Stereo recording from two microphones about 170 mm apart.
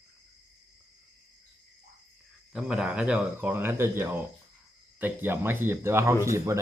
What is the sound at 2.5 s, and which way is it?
Speech, 5° right (ahead or behind).